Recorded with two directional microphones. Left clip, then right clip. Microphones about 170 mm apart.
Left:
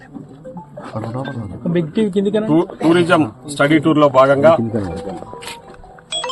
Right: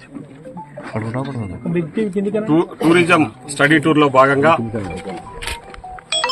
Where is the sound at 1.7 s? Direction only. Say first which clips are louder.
Left 3 dB; 70° left (ahead or behind).